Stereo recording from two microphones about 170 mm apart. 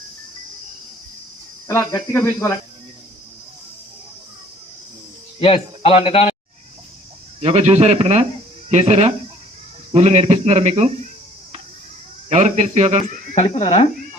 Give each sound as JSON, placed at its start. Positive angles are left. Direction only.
{"t": 1.6, "sound": "speech", "side_deg": 20}
{"t": 5.4, "sound": "a man's voice", "side_deg": 35}
{"t": 7.4, "sound": "a man's voice", "side_deg": -40}
{"t": 12.3, "sound": "a man's voice", "side_deg": -45}
{"t": 13.3, "sound": "a man's voice", "side_deg": 40}